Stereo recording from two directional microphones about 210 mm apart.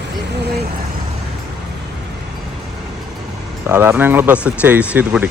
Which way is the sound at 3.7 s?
10° right (ahead or behind).